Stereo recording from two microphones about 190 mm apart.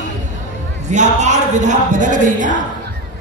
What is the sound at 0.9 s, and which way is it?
A man's voice, 40° right (ahead or behind).